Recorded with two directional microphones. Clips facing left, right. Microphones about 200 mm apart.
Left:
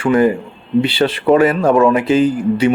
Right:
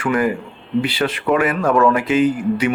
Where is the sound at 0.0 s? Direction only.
30° left (ahead or behind).